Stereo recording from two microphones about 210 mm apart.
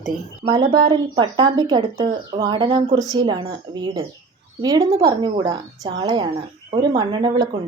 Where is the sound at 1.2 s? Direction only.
20° right (ahead or behind).